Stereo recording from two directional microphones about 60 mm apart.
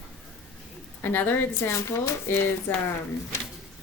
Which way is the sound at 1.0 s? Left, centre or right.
Left.